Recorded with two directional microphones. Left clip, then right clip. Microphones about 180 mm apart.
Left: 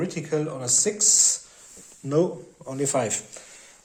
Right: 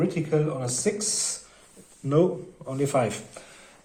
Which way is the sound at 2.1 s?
20° left (ahead or behind).